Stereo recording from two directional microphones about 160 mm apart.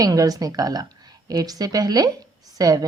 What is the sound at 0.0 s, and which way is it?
A woman's voice, 20° right (ahead or behind).